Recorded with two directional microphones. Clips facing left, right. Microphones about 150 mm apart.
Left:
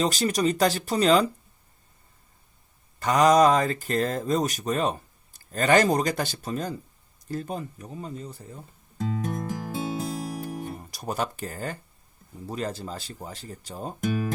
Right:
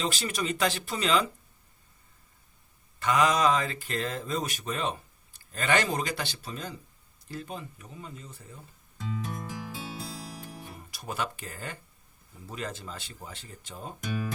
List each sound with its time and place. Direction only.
0.0 s speech: 40° left (ahead or behind)
3.0 s speech: 40° left (ahead or behind)
7.3 s music: 45° left (ahead or behind)
12.5 s speech: 35° left (ahead or behind)